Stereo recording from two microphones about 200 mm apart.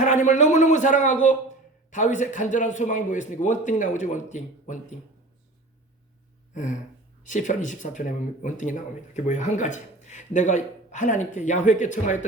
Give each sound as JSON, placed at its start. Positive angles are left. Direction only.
{"t": 0.0, "sound": "a man's voice", "side_deg": 35}
{"t": 6.5, "sound": "a man's voice", "side_deg": 40}